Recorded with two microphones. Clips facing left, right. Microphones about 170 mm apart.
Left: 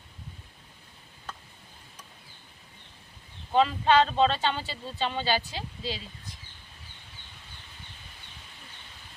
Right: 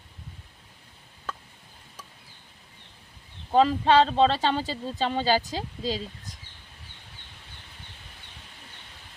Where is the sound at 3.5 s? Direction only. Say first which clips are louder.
Right 3 dB; 35° right (ahead or behind).